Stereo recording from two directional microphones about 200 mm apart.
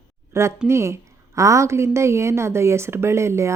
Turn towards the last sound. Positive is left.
turn(degrees=-15)  # may be behind; listen again after turning